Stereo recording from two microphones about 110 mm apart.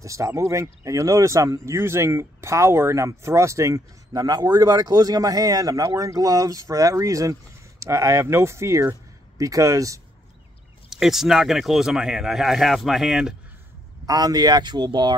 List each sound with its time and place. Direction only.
0.0 s speech: 30° right (ahead or behind)
10.9 s speech: 5° right (ahead or behind)
14.0 s speech: 35° right (ahead or behind)